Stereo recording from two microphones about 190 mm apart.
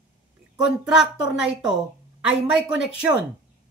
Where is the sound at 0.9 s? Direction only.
5° right (ahead or behind).